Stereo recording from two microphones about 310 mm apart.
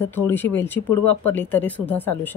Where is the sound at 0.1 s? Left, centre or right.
Centre.